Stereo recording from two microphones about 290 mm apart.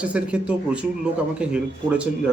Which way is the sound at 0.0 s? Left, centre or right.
Centre.